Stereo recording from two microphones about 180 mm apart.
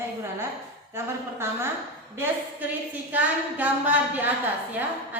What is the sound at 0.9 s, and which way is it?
A woman's voice, 15° right (ahead or behind).